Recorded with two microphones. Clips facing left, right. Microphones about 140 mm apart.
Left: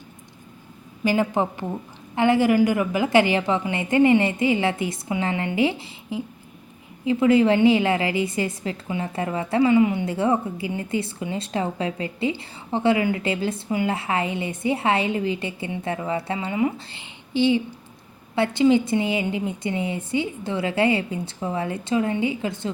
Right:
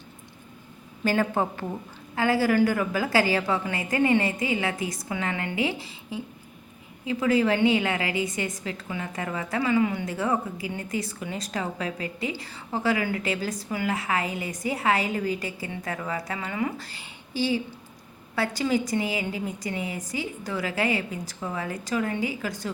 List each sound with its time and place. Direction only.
1.0 s a woman's voice: 15° left (ahead or behind)